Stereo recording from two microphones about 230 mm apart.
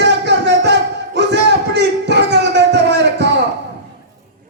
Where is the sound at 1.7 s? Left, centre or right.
Right.